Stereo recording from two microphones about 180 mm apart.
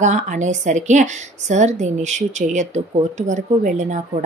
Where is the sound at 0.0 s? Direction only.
40° right (ahead or behind).